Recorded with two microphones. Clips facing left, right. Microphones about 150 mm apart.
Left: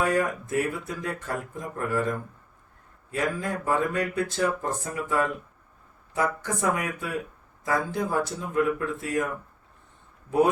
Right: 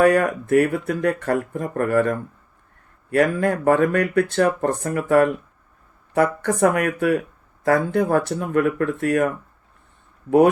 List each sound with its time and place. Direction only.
0.0 s speech: 65° right (ahead or behind)